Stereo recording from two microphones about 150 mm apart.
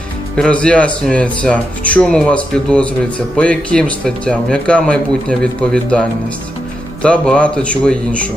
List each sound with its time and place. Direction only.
0.3 s speech: 5° left (ahead or behind)